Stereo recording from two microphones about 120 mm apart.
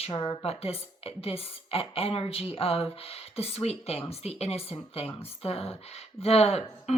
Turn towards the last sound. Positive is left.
turn(degrees=60)  # may be behind; listen again after turning